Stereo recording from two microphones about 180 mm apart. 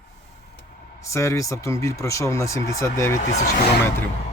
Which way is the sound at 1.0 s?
15° left (ahead or behind).